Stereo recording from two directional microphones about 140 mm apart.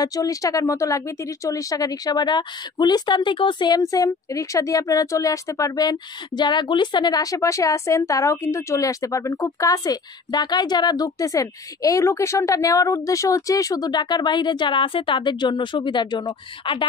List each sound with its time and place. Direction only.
0.0 s speech: 25° left (ahead or behind)